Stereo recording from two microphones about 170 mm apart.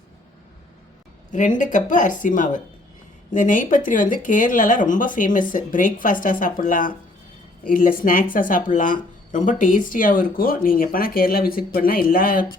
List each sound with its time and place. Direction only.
1.3 s speech: 50° left (ahead or behind)